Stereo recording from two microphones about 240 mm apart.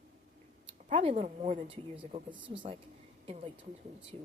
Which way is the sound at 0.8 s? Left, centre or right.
Right.